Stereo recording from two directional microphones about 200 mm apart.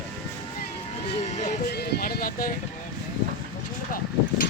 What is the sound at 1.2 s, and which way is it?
Music, 35° left (ahead or behind).